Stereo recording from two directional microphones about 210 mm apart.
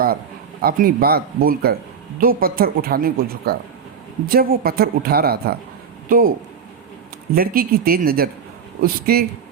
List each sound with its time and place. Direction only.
0.6 s a woman's voice: 40° right (ahead or behind)
7.3 s a woman's voice: 45° right (ahead or behind)